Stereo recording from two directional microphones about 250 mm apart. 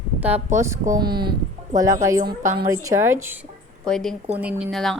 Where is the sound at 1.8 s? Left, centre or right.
Centre.